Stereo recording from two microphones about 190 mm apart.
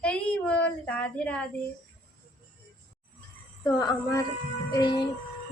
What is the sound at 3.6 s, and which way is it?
A woman's voice, 20° left (ahead or behind).